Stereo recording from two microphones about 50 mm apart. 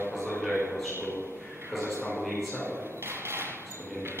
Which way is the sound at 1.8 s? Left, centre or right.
Right.